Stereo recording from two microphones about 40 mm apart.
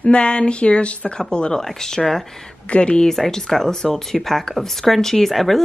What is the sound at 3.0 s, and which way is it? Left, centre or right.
Speech, centre.